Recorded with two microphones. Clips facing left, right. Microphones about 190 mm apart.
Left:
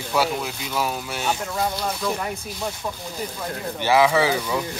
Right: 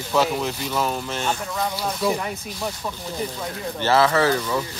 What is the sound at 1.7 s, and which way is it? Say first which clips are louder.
Speech: right 2 dB; 5° right (ahead or behind).